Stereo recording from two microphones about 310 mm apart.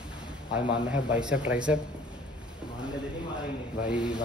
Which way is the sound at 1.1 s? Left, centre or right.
Centre.